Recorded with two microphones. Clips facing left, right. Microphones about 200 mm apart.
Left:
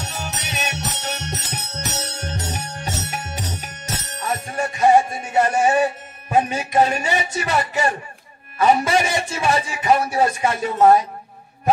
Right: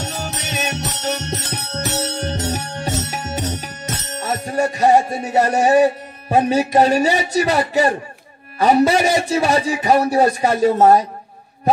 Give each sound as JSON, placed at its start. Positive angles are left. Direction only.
{"t": 0.0, "sound": "music", "side_deg": -35}
{"t": 8.5, "sound": "a man's voice", "side_deg": -35}